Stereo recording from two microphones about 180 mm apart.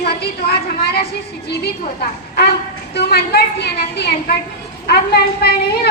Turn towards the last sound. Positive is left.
turn(degrees=60)  # may be behind; listen again after turning